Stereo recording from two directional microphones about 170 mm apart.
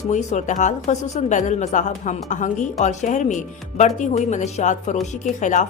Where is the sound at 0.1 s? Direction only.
45° left (ahead or behind).